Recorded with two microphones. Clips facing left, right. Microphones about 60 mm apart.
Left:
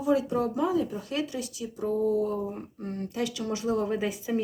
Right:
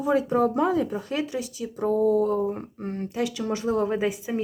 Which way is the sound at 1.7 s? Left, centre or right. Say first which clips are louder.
Right 5 dB; right.